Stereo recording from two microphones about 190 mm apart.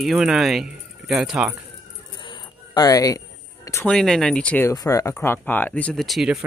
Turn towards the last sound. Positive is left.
turn(degrees=0)  # may be behind; listen again after turning